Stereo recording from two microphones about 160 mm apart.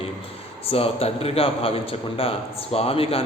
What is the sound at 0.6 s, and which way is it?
A man's voice, 40° left (ahead or behind).